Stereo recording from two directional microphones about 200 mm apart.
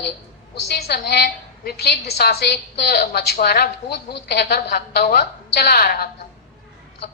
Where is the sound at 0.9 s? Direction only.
50° left (ahead or behind).